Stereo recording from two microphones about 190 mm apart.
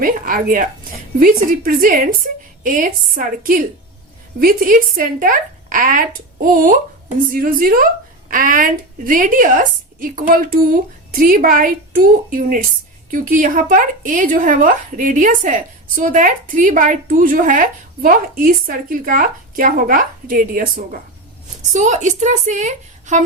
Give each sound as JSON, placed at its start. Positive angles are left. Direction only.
{"t": 0.0, "sound": "a woman's voice", "side_deg": -45}